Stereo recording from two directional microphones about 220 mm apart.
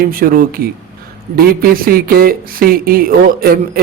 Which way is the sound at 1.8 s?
40° right (ahead or behind).